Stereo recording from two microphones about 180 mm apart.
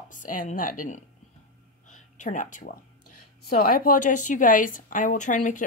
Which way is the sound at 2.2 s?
45° left (ahead or behind).